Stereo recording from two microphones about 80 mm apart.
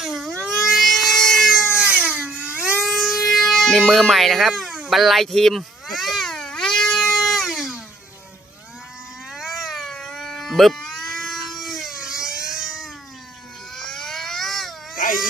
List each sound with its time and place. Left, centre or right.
0.0 s vehicle: centre
0.4 s a sound: centre
1.8 s a sound: centre
2.8 s music: centre
9.3 s cat: centre
13.7 s baby cry: centre